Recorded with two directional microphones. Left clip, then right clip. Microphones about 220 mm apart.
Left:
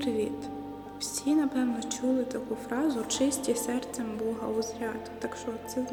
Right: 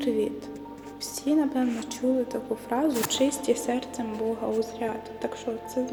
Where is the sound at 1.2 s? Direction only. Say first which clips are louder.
Right 3 dB; 20° left (ahead or behind).